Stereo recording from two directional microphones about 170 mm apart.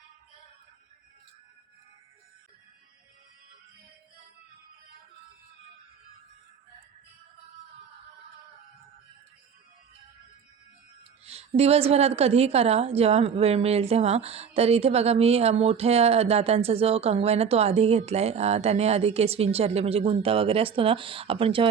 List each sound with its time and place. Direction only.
11.3 s a woman's voice: 35° right (ahead or behind)